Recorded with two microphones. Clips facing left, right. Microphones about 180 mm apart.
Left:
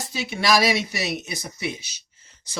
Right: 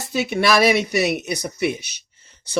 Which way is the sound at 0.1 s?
60° right (ahead or behind).